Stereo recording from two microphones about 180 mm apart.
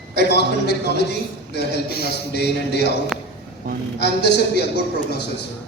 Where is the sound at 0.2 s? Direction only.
65° left (ahead or behind).